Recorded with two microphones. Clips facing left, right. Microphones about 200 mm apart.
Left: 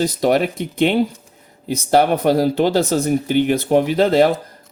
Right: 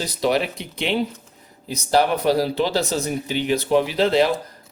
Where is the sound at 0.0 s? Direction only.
50° left (ahead or behind).